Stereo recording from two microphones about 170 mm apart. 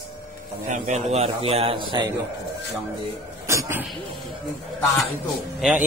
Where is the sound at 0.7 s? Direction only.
45° right (ahead or behind); by 2.1 s 25° right (ahead or behind).